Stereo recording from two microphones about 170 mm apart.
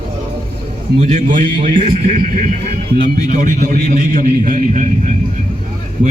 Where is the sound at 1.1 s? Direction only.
50° right (ahead or behind).